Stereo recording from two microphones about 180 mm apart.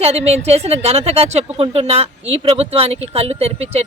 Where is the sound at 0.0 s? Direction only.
35° right (ahead or behind).